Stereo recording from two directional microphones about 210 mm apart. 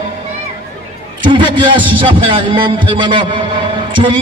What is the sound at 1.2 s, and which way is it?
A man's voice, 20° right (ahead or behind).